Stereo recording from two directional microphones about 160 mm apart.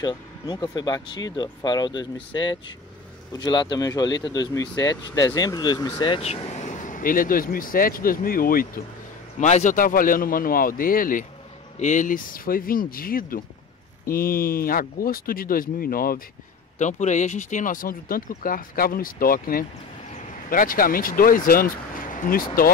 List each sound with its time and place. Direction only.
0.0 s speech: 25° left (ahead or behind); by 8.8 s 65° left (ahead or behind)
9.4 s speech: 50° left (ahead or behind); by 16.2 s 65° left (ahead or behind)
16.7 s speech: 50° left (ahead or behind); by 22.7 s 65° left (ahead or behind)